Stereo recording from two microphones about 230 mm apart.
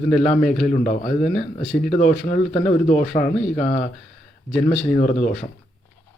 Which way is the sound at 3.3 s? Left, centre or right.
Centre.